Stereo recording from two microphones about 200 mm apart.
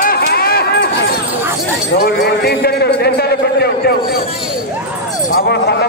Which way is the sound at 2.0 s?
50° left (ahead or behind).